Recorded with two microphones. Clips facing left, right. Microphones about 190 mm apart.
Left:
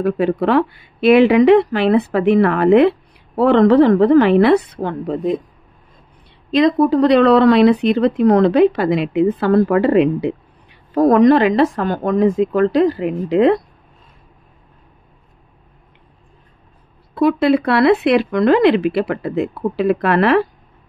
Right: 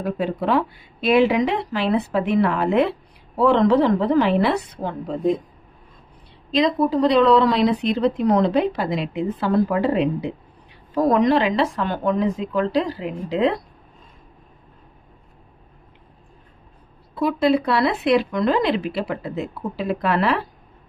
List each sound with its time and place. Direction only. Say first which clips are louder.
0.0 s speech: left 7 dB; 70° left (ahead or behind)
6.5 s speech: left 6 dB; 60° left (ahead or behind)
11.0 s speech: left 6 dB; 50° left (ahead or behind)
17.1 s speech: left 5 dB; 65° left (ahead or behind)